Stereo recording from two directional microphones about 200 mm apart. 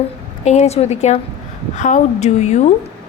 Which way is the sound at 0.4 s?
30° left (ahead or behind).